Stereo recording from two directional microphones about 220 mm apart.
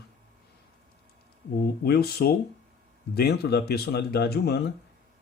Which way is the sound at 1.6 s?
45° left (ahead or behind).